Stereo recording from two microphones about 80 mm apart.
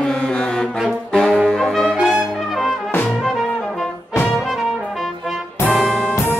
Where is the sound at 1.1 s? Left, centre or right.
Centre.